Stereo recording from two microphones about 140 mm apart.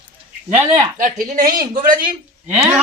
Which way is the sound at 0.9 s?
75° right (ahead or behind).